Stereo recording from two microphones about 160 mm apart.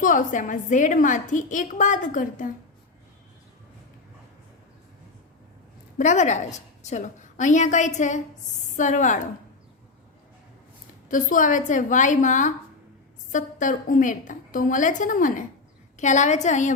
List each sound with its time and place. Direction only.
0.0 s a woman's voice: 55° left (ahead or behind)
6.0 s a woman's voice: 50° left (ahead or behind)
11.1 s a woman's voice: 55° left (ahead or behind)